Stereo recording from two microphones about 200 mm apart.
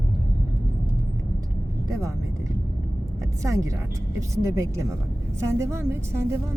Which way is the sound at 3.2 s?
15° right (ahead or behind).